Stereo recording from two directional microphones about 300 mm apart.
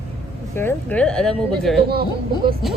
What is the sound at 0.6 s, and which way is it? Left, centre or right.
A woman's voice, centre.